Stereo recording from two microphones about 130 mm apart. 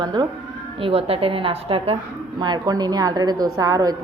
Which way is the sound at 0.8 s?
45° right (ahead or behind).